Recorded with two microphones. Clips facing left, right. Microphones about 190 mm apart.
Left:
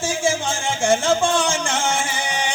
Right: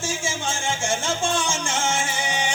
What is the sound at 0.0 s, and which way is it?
Music, 60° left (ahead or behind).